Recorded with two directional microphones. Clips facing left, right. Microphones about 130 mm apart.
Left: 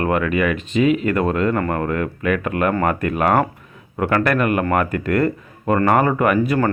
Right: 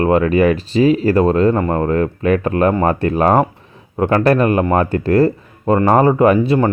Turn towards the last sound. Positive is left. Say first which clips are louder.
# right 5 dB
turn(degrees=-25)  # may be behind; listen again after turning